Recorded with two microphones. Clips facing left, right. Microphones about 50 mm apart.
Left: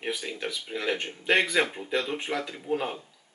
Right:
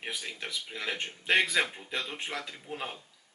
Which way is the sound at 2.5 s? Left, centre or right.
Centre.